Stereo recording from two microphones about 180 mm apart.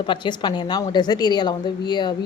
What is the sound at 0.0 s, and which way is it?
A woman's voice, 25° left (ahead or behind).